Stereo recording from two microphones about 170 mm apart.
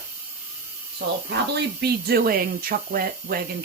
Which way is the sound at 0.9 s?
70° right (ahead or behind).